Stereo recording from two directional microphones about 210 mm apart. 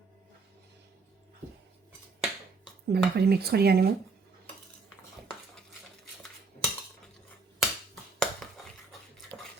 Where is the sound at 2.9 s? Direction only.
50° right (ahead or behind).